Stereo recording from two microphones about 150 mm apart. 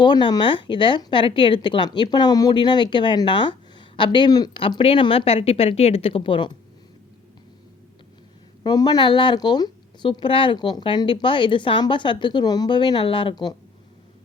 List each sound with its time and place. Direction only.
0.0 s speech: 30° left (ahead or behind)
4.6 s speech: 40° left (ahead or behind)
8.6 s speech: 25° left (ahead or behind)